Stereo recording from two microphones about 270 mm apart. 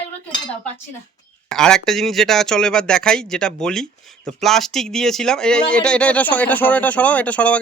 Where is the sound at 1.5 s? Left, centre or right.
Centre.